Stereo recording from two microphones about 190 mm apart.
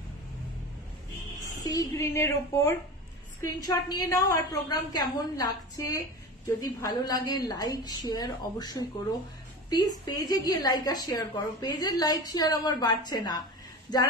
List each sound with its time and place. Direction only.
1.6 s a woman's voice: 20° left (ahead or behind)